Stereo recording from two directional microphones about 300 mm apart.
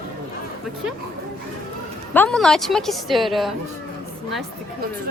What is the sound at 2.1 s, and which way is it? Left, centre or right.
A woman's voice, centre.